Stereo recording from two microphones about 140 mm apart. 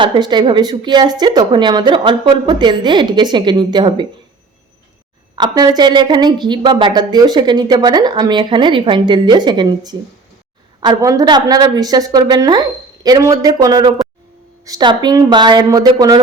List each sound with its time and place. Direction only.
0.0 s a woman's voice: 35° right (ahead or behind)
5.4 s a woman's voice: 30° right (ahead or behind)